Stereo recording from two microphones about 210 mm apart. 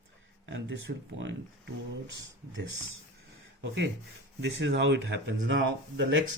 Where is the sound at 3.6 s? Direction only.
55° right (ahead or behind).